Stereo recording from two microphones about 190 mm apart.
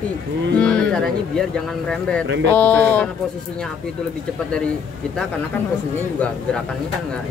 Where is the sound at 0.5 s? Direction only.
5° left (ahead or behind).